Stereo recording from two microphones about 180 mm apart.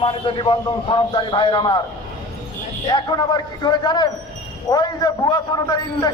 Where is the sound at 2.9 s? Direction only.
25° left (ahead or behind).